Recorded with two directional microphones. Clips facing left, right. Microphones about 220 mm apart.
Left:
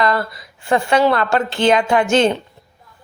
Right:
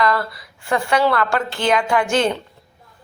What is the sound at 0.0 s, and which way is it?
A woman's voice, 25° left (ahead or behind).